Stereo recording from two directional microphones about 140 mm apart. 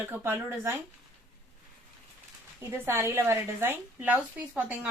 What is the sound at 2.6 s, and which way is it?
A woman's voice, 20° right (ahead or behind).